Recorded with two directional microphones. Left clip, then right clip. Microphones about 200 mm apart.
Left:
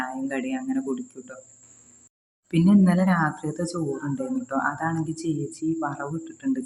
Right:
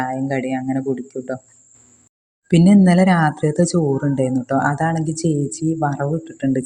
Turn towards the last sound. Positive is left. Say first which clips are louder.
# right 7 dB
turn(degrees=-25)  # may be behind; listen again after turning